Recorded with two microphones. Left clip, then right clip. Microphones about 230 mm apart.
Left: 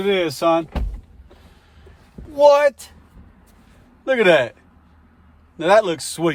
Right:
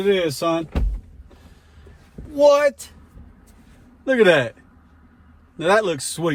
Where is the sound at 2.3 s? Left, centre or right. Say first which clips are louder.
Left 2 dB; left.